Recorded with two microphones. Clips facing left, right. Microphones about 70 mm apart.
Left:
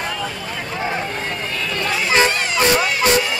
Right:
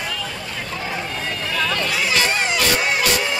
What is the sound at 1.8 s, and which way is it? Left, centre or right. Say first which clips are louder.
Vehicle: left 3 dB; left.